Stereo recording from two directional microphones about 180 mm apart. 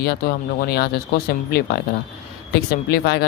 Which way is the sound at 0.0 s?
60° left (ahead or behind).